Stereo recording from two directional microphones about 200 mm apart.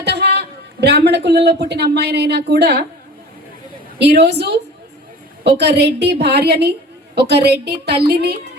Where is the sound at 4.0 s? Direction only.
55° right (ahead or behind).